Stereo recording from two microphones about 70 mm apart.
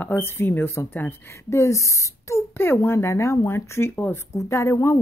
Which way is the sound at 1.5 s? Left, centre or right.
Left.